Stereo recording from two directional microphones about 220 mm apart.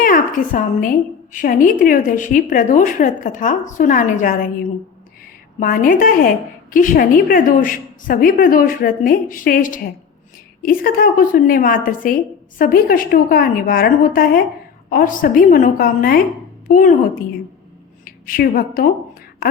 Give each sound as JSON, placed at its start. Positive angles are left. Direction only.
{"t": 0.0, "sound": "a woman's voice", "side_deg": 40}
{"t": 18.3, "sound": "a woman's voice", "side_deg": 40}